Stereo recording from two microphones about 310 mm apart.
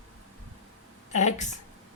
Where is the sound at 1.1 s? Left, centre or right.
Left.